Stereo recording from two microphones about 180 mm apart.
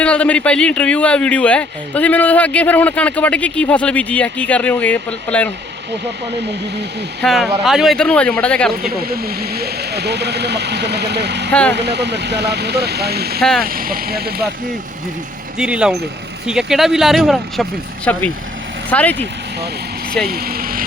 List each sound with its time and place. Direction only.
0.0 s speech: 5° left (ahead or behind)
7.2 s speech: 5° left (ahead or behind)
8.8 s speech: 55° right (ahead or behind)
13.4 s speech: centre (ahead or behind)
13.7 s speech: 55° right (ahead or behind)
15.5 s speech: 5° right (ahead or behind)
20.2 s speech: 55° right (ahead or behind)